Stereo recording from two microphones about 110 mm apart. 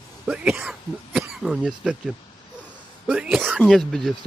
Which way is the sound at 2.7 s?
10° right (ahead or behind).